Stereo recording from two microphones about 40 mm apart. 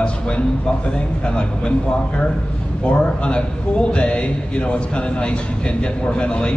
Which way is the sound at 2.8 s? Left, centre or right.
Left.